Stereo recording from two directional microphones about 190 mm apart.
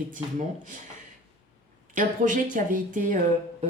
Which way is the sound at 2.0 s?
45° right (ahead or behind).